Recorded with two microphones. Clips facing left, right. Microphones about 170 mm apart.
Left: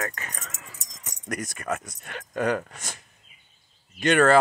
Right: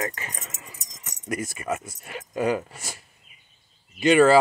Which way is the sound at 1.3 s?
5° right (ahead or behind).